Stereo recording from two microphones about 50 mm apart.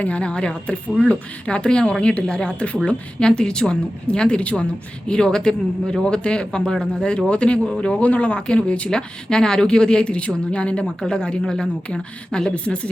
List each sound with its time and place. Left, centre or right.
0.0 s speech: left
8.9 s speech: centre